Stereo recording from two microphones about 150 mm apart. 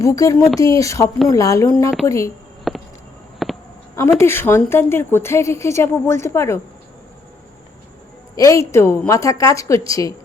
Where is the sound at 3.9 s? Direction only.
15° left (ahead or behind).